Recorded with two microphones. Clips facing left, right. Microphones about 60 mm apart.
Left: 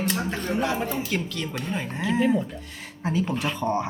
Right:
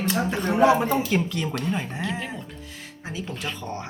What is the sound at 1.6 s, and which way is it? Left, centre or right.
Speech, centre.